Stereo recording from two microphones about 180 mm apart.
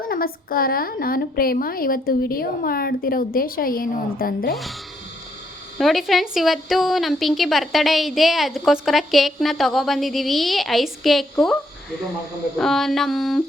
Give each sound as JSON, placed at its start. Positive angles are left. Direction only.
{"t": 0.0, "sound": "a woman's voice", "side_deg": 55}
{"t": 5.7, "sound": "speech", "side_deg": 0}
{"t": 12.5, "sound": "speech", "side_deg": 0}